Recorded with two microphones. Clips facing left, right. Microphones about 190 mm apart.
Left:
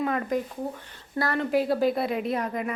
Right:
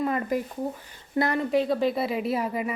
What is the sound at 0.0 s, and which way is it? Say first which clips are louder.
Speech: even; 5° right (ahead or behind).